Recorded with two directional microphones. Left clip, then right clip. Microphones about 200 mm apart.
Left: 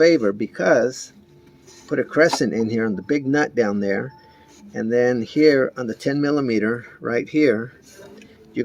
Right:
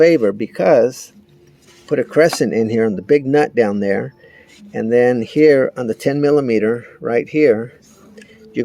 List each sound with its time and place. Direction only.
0.0 s speech: 30° right (ahead or behind)